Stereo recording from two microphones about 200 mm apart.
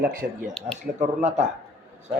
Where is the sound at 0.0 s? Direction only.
45° right (ahead or behind).